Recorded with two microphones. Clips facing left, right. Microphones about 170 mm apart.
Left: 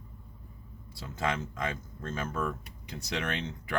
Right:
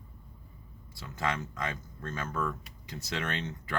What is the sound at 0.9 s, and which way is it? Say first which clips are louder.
Speech: left 1 dB; 20° left (ahead or behind).